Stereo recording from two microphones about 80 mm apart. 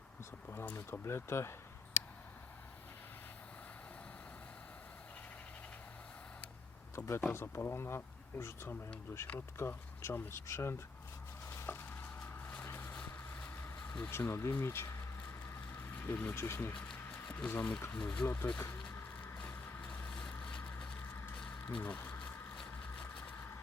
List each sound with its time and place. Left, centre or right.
0.9 s speech: left
6.9 s speech: left
11.4 s a sound: left
12.6 s vehicle: left
14.5 s speech: left
15.4 s a sound: left
17.3 s speech: centre
18.9 s vehicle: left
20.4 s a sound: centre
21.8 s speech: left